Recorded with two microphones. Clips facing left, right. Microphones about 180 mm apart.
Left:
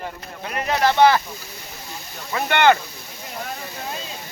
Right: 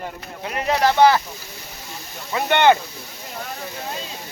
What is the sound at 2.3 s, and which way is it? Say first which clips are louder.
Speech: right 1 dB; 20° right (ahead or behind).